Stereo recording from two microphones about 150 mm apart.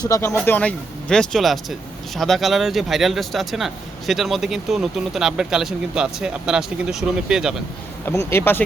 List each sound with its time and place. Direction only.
0.0 s speech: 20° left (ahead or behind)
0.3 s speech: 10° left (ahead or behind); by 7.5 s 5° right (ahead or behind)
8.0 s speech: 15° left (ahead or behind)